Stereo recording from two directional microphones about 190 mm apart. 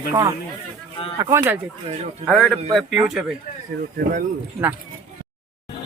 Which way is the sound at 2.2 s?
5° left (ahead or behind).